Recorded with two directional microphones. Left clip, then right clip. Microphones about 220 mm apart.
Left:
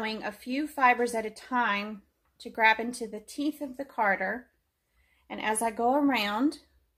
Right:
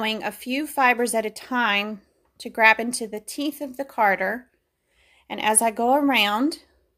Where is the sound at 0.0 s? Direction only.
50° right (ahead or behind).